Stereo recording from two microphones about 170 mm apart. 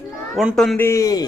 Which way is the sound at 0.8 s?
20° left (ahead or behind).